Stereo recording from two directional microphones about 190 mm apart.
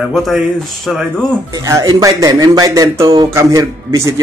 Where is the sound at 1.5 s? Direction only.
15° right (ahead or behind).